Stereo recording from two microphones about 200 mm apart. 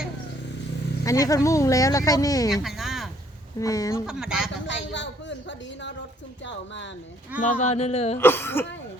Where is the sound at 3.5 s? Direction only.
15° left (ahead or behind).